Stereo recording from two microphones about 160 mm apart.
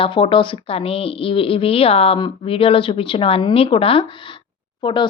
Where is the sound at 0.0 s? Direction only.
35° left (ahead or behind).